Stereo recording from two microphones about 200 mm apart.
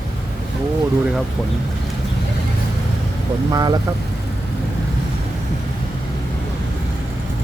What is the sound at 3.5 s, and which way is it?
Speech, 20° right (ahead or behind).